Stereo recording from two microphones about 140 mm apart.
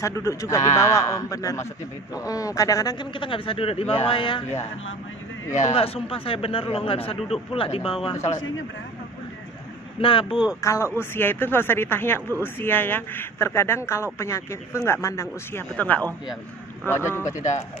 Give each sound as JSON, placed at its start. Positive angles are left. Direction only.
{"t": 0.0, "sound": "a man's voice", "side_deg": 20}
{"t": 5.5, "sound": "a man's voice", "side_deg": 50}
{"t": 10.0, "sound": "a man's voice", "side_deg": 40}
{"t": 10.6, "sound": "a man's voice", "side_deg": 20}
{"t": 15.7, "sound": "a man's voice", "side_deg": 10}
{"t": 17.4, "sound": "speech", "side_deg": 55}